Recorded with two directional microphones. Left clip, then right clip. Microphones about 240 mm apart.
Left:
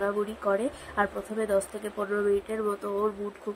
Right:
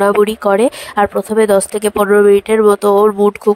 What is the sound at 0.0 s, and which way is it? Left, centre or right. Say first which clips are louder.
Speech: right 17 dB; right.